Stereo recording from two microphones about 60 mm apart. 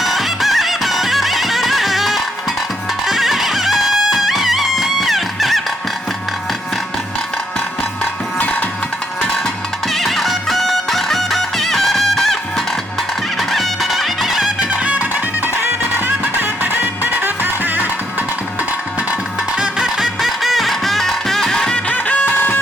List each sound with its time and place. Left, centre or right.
0.0 s music: centre
9.9 s music: centre
14.7 s music: right
15.4 s music: right
19.5 s music: centre
20.0 s music: centre
21.8 s music: left